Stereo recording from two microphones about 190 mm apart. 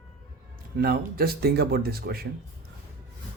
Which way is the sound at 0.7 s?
55° right (ahead or behind).